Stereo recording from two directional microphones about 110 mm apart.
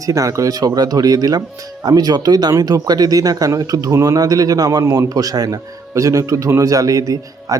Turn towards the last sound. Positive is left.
turn(degrees=-30)  # may be behind; listen again after turning